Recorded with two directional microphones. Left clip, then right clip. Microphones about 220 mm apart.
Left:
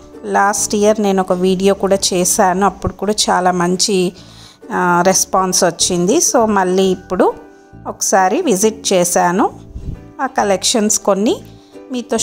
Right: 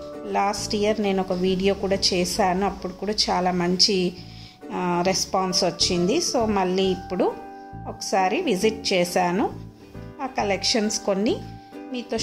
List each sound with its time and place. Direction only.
0.3 s a woman's voice: 35° left (ahead or behind)